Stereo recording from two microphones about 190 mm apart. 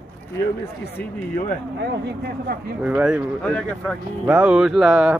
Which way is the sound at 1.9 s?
55° right (ahead or behind).